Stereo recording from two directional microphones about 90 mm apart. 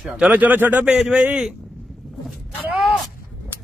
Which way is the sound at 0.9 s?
5° right (ahead or behind).